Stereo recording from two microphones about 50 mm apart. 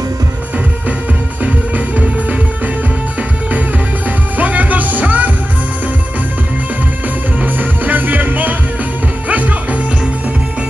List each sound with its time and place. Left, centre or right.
4.4 s music: right
7.3 s music: right